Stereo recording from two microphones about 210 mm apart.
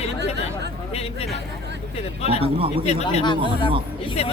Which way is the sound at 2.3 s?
25° right (ahead or behind).